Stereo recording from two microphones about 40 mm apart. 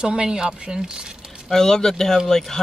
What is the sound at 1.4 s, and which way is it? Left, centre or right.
Speech, centre.